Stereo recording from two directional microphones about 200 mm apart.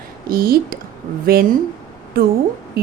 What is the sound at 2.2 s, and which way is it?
Speech, 50° right (ahead or behind).